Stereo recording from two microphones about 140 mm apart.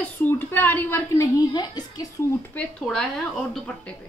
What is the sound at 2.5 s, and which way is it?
A woman's voice, 10° left (ahead or behind).